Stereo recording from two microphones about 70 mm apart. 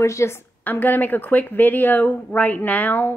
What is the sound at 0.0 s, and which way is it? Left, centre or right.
Speech, left.